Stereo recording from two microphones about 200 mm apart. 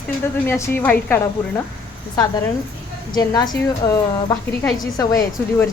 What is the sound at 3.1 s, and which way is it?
A woman's voice, 20° left (ahead or behind).